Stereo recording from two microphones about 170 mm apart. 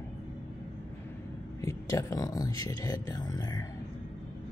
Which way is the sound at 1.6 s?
20° left (ahead or behind).